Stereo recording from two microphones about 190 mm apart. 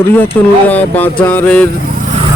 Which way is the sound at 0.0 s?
10° left (ahead or behind).